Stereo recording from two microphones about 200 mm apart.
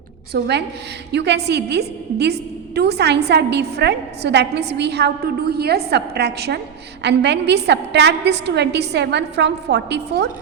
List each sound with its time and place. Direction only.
0.3 s a woman's voice: 55° right (ahead or behind)